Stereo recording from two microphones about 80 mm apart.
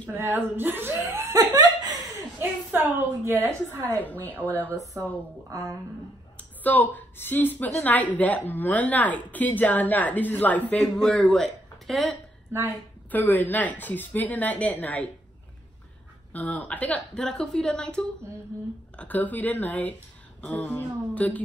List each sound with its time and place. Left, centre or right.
0.1 s speech: right
1.2 s laughter: right
2.7 s speech: right
3.9 s a woman's voice: left
5.5 s a woman's voice: right
6.3 s a woman's voice: left
10.8 s speech: centre
13.1 s a woman's voice: left
16.3 s a woman's voice: centre